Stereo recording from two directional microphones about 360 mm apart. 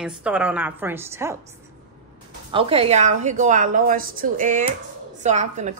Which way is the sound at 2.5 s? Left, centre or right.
Centre.